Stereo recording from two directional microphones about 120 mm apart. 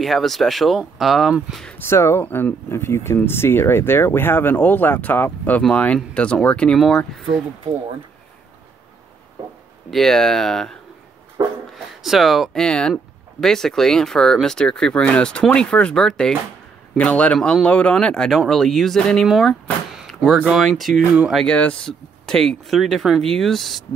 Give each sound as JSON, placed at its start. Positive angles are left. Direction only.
{"t": 0.0, "sound": "speech", "side_deg": 0}
{"t": 1.9, "sound": "speech", "side_deg": 20}
{"t": 9.8, "sound": "speech", "side_deg": 5}
{"t": 11.4, "sound": "a sound", "side_deg": -30}
{"t": 11.7, "sound": "speech", "side_deg": 0}
{"t": 20.0, "sound": "door", "side_deg": 0}
{"t": 20.3, "sound": "speech", "side_deg": -5}